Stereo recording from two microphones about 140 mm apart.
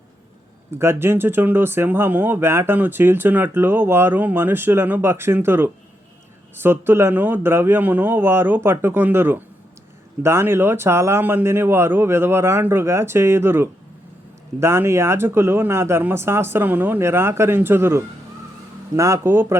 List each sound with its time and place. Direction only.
0.7 s speech: 20° right (ahead or behind)